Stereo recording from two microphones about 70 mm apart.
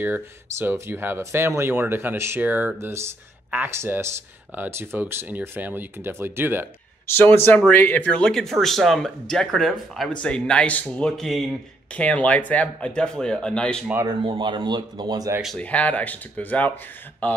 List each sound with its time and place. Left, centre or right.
0.0 s speech: right
7.2 s speech: left
8.3 s speech: centre
11.2 s speech: centre
11.9 s speech: centre
14.0 s speech: right
15.6 s speech: centre